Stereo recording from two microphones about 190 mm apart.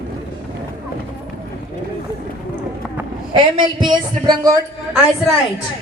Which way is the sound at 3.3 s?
25° right (ahead or behind).